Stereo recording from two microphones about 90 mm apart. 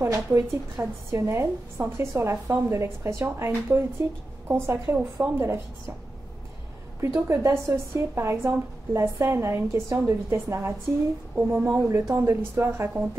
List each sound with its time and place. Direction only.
0.0 s a woman's voice: 35° right (ahead or behind)
7.0 s a woman's voice: 30° right (ahead or behind)